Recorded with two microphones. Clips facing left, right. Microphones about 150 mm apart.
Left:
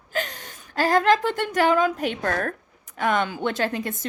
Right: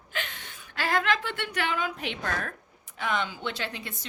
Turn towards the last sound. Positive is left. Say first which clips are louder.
# left 10 dB
turn(degrees=45)  # may be behind; listen again after turning